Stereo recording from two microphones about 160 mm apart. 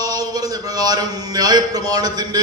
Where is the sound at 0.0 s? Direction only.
25° right (ahead or behind).